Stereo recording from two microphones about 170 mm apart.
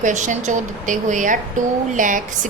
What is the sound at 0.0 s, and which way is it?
A woman's voice, 45° right (ahead or behind).